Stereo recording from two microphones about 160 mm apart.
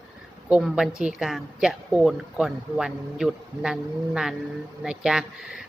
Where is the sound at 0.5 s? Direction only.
5° right (ahead or behind).